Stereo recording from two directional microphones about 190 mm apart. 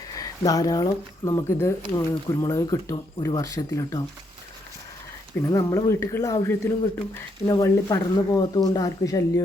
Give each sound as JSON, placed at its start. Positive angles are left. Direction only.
{"t": 0.1, "sound": "speech", "side_deg": 20}
{"t": 5.5, "sound": "speech", "side_deg": 15}